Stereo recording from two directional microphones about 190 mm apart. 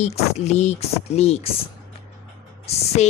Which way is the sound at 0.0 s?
35° left (ahead or behind).